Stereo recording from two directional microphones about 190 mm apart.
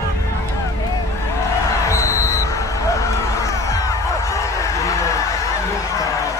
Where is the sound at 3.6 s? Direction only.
15° left (ahead or behind).